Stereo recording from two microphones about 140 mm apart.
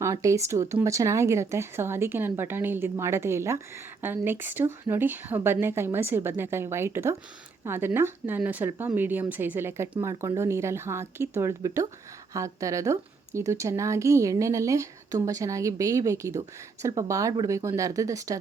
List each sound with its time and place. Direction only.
0.0 s a woman's voice: 20° right (ahead or behind)